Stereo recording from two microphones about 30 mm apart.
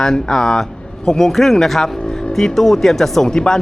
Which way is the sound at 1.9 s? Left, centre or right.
Left.